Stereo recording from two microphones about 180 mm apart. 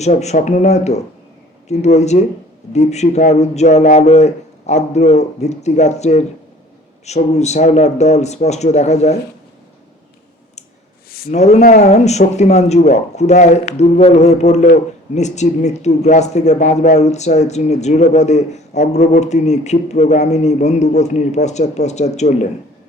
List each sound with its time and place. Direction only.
0.0 s speech: 40° left (ahead or behind)
11.3 s speech: 40° left (ahead or behind)